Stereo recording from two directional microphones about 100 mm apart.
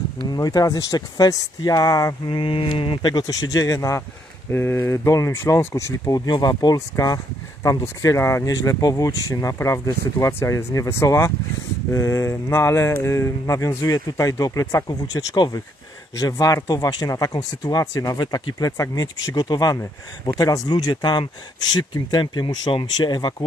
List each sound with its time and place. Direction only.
0.3 s speech: 40° left (ahead or behind)
2.2 s speech: 55° left (ahead or behind); by 14.9 s 30° left (ahead or behind)
14.9 s speech: 45° left (ahead or behind)